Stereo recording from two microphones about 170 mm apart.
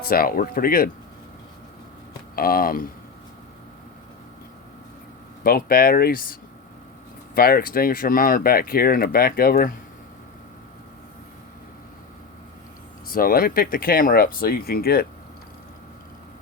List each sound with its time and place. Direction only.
0.1 s speech: 60° left (ahead or behind)
2.3 s speech: 60° left (ahead or behind)
5.4 s speech: 60° left (ahead or behind)
7.3 s speech: 60° left (ahead or behind)
13.1 s speech: 60° left (ahead or behind)